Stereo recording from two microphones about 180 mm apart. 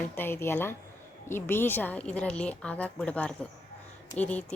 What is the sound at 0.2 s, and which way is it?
A woman's voice, 15° left (ahead or behind).